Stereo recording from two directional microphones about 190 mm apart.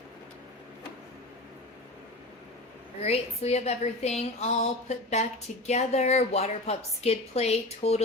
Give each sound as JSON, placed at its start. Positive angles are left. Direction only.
{"t": 3.0, "sound": "a woman's voice", "side_deg": 35}